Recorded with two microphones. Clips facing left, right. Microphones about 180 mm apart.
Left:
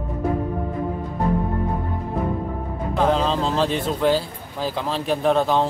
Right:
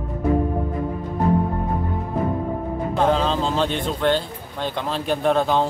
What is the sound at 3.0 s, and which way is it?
A man's voice, centre (ahead or behind).